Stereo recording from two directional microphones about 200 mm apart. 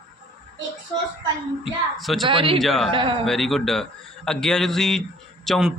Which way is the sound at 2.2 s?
25° right (ahead or behind).